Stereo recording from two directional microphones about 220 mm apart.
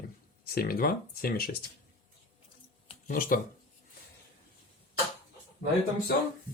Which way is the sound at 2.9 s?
40° left (ahead or behind).